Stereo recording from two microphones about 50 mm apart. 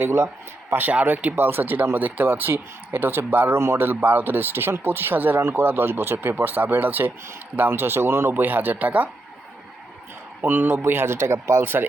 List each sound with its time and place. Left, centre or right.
0.0 s speech: right
1.0 s speech: right
3.5 s speech: right
5.4 s speech: right
7.7 s speech: right
10.4 s speech: right
10.8 s speech: right
11.6 s speech: right